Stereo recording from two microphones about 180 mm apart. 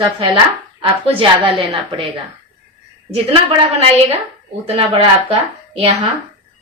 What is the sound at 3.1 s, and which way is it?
A woman's voice, 35° right (ahead or behind).